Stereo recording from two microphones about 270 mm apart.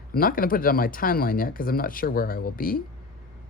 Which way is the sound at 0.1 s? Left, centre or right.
Left.